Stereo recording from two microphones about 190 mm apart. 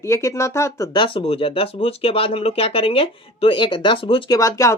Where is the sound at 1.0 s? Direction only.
30° left (ahead or behind).